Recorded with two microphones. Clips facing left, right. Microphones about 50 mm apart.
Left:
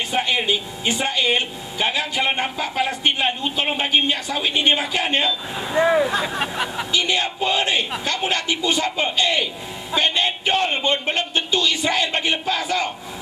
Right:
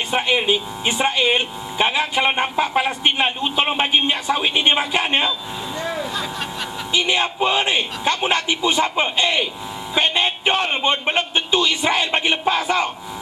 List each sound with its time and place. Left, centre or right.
0.2 s a man's voice: centre
5.7 s speech: left
7.1 s a man's voice: right